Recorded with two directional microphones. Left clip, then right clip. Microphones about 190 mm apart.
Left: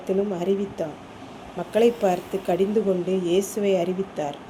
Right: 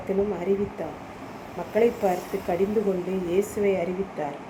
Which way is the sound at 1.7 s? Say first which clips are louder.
Left 2 dB; 50° left (ahead or behind).